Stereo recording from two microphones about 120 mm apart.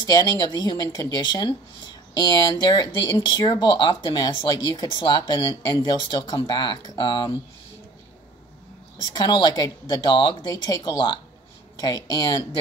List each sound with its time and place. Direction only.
0.0 s speech: 30° left (ahead or behind)
9.1 s speech: 35° left (ahead or behind)